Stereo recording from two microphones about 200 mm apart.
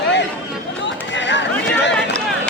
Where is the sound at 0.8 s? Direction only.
60° left (ahead or behind).